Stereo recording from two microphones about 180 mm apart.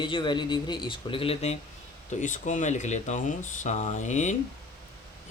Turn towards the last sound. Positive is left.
turn(degrees=40)  # may be behind; listen again after turning